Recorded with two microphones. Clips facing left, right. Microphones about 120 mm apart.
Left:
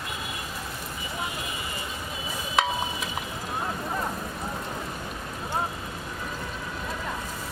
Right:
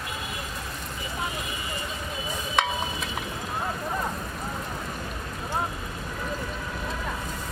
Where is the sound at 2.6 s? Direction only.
5° left (ahead or behind).